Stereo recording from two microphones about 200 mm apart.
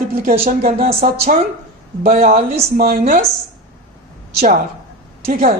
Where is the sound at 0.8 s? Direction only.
30° right (ahead or behind).